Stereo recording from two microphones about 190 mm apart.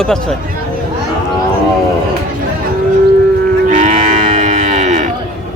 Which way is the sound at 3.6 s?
40° right (ahead or behind).